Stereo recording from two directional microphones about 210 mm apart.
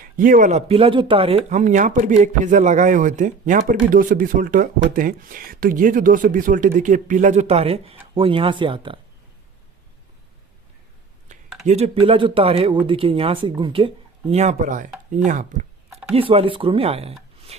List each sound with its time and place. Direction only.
0.0 s speech: 40° right (ahead or behind); by 9.0 s 25° right (ahead or behind)
11.6 s speech: 30° right (ahead or behind)
16.1 s speech: 25° right (ahead or behind)